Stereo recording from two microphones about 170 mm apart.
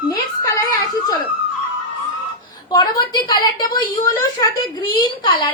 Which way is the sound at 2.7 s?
25° left (ahead or behind).